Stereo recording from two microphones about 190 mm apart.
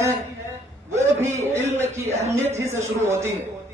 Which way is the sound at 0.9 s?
15° right (ahead or behind).